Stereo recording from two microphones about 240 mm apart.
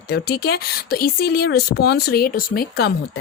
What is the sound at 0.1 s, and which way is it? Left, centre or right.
Speech, left.